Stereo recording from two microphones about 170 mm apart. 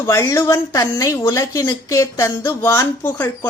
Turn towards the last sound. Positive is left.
turn(degrees=10)  # may be behind; listen again after turning